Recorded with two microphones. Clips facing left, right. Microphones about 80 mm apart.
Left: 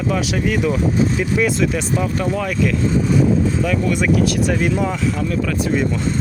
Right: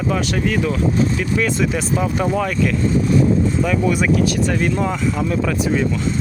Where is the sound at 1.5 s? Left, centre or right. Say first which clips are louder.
Even; centre.